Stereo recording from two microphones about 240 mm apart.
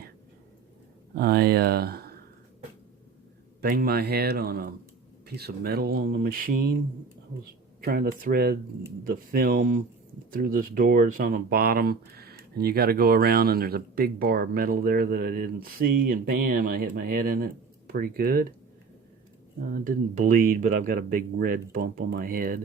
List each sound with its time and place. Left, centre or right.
1.1 s speech: right
3.6 s speech: right
7.8 s speech: right
19.7 s speech: right